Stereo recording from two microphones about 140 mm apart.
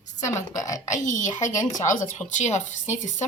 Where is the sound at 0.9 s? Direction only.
60° left (ahead or behind).